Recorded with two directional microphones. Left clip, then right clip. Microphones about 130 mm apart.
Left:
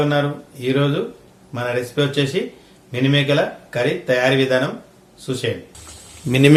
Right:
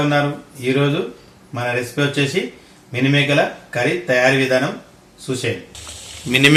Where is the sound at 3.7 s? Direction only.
45° left (ahead or behind).